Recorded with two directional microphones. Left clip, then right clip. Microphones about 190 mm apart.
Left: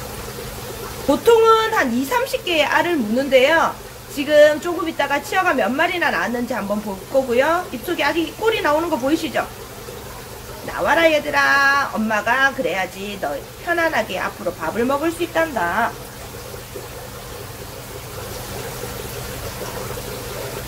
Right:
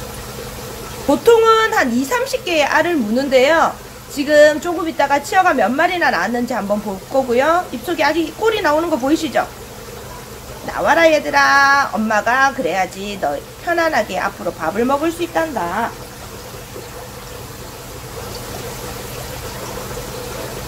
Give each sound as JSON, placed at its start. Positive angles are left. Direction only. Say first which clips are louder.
{"t": 1.2, "sound": "a woman's voice", "louder": "right 2 dB", "side_deg": -15}
{"t": 10.8, "sound": "a woman's voice", "louder": "right 3 dB", "side_deg": -15}